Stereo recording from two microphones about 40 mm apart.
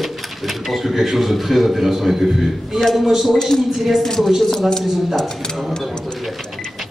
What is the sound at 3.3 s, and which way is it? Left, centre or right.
Speech, centre.